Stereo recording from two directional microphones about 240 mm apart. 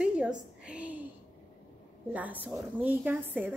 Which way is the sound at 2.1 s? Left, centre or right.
Centre.